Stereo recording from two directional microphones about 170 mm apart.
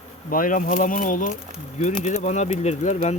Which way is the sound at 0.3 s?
55° left (ahead or behind).